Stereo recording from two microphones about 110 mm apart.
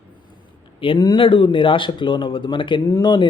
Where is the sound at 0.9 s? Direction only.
40° left (ahead or behind).